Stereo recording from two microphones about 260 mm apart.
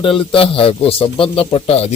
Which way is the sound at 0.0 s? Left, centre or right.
Centre.